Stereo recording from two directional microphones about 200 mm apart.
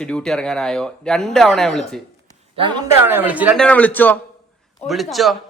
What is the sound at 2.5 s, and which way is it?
Speech, 25° right (ahead or behind).